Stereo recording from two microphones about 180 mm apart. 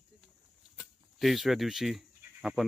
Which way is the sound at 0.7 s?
Centre (ahead or behind).